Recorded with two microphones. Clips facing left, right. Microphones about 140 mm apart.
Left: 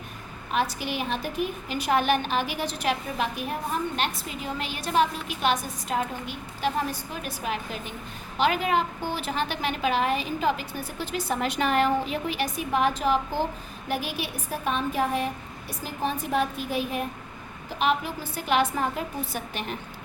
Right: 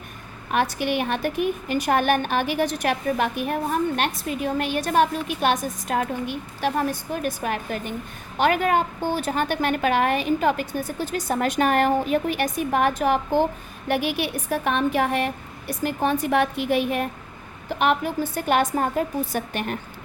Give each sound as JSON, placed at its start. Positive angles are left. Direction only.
{"t": 0.5, "sound": "a woman's voice", "side_deg": -60}
{"t": 17.7, "sound": "a woman's voice", "side_deg": -55}